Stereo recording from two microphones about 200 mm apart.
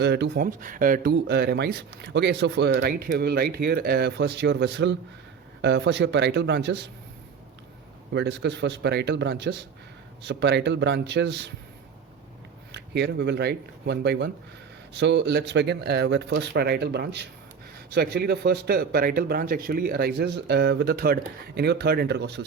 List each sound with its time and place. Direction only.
0.0 s speech: 60° right (ahead or behind)
1.1 s speech: 55° right (ahead or behind)
8.1 s speech: 60° right (ahead or behind)
12.7 s speech: 60° right (ahead or behind)